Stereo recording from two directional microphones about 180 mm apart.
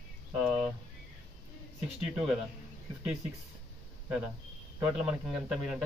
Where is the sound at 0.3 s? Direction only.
5° right (ahead or behind).